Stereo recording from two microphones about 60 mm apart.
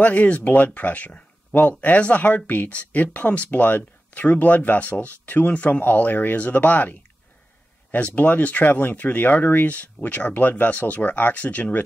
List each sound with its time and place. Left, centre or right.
0.0 s speech: left